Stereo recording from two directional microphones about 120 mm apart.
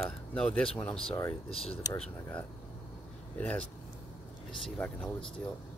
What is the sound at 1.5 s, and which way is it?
Speech, 55° left (ahead or behind).